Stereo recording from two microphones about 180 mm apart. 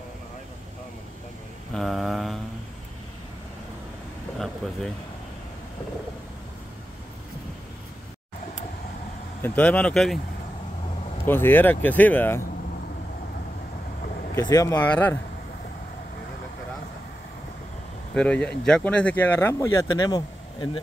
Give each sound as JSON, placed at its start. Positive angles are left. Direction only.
{"t": 1.7, "sound": "mantra", "side_deg": 0}
{"t": 9.4, "sound": "speech", "side_deg": 5}
{"t": 11.2, "sound": "speech", "side_deg": 10}
{"t": 14.3, "sound": "speech", "side_deg": 20}
{"t": 18.1, "sound": "speech", "side_deg": 5}